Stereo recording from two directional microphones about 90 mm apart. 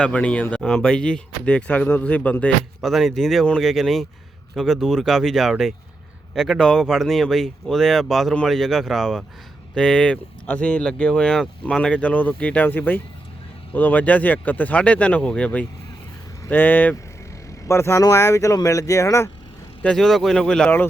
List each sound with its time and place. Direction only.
0.0 s speech: 15° left (ahead or behind)
2.8 s speech: centre (ahead or behind); by 19.3 s 35° left (ahead or behind)
19.8 s speech: 5° left (ahead or behind)